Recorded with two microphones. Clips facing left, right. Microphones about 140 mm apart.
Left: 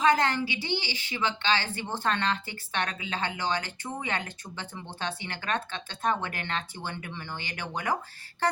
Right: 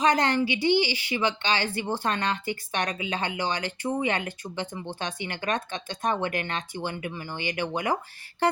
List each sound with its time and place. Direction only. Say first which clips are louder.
0.0 s speech: right 2 dB; 20° right (ahead or behind)